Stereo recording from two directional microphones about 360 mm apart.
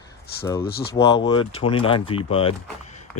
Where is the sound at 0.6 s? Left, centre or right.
Left.